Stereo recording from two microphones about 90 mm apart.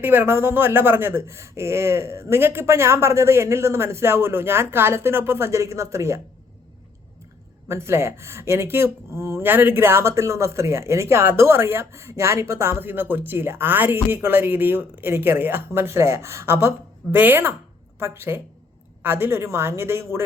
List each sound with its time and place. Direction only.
0.0 s speech: 25° right (ahead or behind)
7.7 s speech: 30° right (ahead or behind)